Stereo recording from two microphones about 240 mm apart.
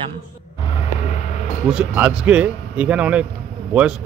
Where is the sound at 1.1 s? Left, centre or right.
Left.